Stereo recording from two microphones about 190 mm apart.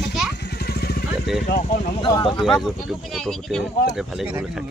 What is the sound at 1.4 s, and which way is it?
Speech, 45° left (ahead or behind).